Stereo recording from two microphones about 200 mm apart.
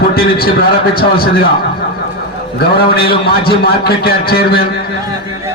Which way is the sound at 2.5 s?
50° left (ahead or behind).